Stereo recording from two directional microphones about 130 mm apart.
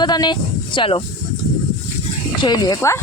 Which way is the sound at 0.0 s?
35° left (ahead or behind).